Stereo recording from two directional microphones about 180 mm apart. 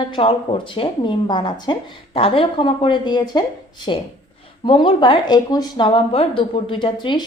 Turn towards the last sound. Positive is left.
turn(degrees=25)  # may be behind; listen again after turning